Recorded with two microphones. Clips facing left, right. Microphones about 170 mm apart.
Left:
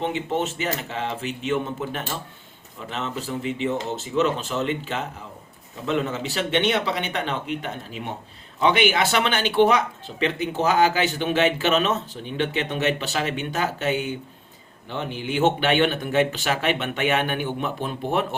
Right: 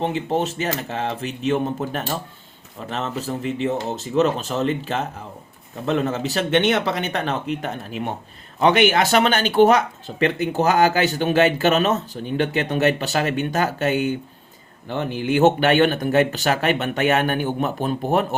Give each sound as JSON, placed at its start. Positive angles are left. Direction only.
{"t": 0.0, "sound": "speech", "side_deg": -35}
{"t": 7.9, "sound": "speech", "side_deg": -60}